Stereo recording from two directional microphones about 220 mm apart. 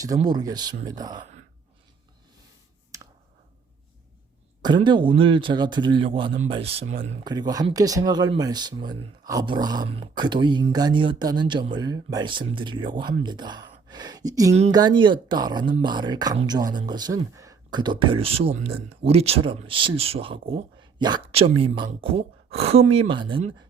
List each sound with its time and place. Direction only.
0.3 s speech: 20° right (ahead or behind)
2.9 s clicking: 15° right (ahead or behind)
4.6 s speech: 20° right (ahead or behind)